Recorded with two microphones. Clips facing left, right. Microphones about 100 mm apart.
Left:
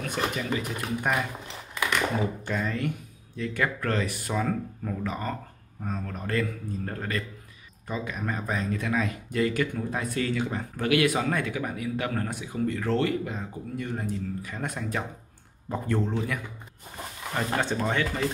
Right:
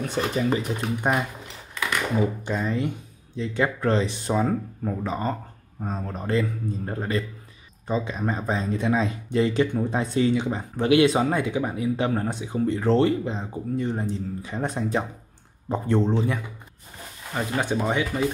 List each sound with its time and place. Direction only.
0.1 s speech: 35° right (ahead or behind)
2.4 s speech: 20° right (ahead or behind)
17.6 s speech: 15° right (ahead or behind)